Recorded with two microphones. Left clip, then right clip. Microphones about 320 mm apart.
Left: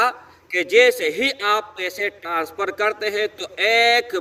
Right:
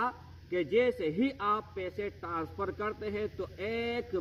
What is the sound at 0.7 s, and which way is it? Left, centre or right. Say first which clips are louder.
A man's voice: left 14 dB; centre.